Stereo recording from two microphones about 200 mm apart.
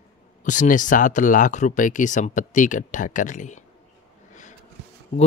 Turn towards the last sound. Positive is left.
turn(degrees=35)  # may be behind; listen again after turning